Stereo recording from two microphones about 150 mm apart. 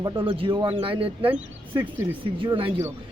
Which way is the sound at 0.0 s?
35° right (ahead or behind).